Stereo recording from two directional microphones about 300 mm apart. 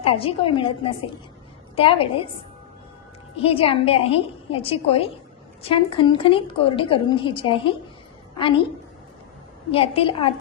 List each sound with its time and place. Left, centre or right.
0.0 s a woman's voice: centre
3.4 s a woman's voice: centre
9.7 s a woman's voice: centre